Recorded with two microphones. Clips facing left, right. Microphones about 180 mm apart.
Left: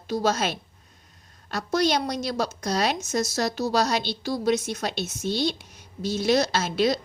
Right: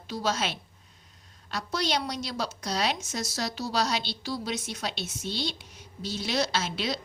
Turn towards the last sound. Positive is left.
turn(degrees=45)  # may be behind; listen again after turning